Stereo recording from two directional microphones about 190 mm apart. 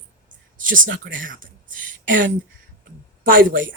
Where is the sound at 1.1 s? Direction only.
45° right (ahead or behind).